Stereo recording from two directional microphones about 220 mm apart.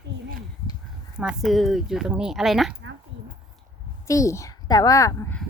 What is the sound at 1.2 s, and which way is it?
Speech, centre (ahead or behind).